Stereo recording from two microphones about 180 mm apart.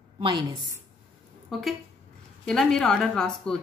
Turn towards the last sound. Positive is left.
turn(degrees=5)  # may be behind; listen again after turning